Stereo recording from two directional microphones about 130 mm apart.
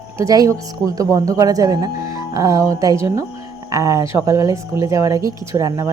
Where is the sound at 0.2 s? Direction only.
25° right (ahead or behind).